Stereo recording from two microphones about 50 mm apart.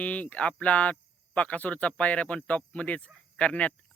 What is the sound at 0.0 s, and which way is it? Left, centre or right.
Speech, left.